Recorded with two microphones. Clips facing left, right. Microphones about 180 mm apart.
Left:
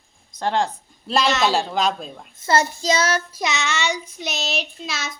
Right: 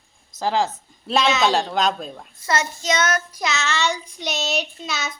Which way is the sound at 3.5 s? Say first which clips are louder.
Right 1 dB; 15° left (ahead or behind).